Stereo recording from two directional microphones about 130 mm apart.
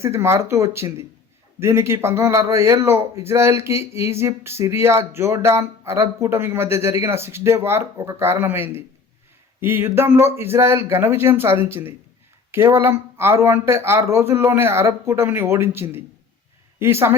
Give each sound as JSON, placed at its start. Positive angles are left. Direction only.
{"t": 0.0, "sound": "a man's voice", "side_deg": -20}